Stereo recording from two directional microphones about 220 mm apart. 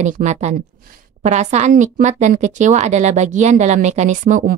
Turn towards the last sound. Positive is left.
turn(degrees=-35)  # may be behind; listen again after turning